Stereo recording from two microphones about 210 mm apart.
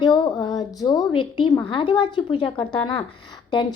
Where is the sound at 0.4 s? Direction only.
20° left (ahead or behind).